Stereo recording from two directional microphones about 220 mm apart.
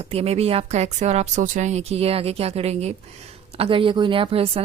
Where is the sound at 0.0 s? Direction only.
25° right (ahead or behind).